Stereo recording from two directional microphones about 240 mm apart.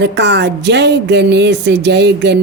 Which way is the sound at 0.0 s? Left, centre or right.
Right.